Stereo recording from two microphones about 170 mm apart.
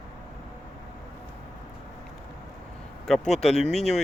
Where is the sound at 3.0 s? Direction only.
5° left (ahead or behind).